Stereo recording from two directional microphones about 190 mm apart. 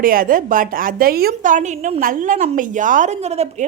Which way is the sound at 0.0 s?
50° right (ahead or behind).